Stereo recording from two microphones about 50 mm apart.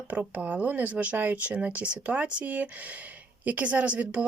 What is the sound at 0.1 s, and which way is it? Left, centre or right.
Speech, right.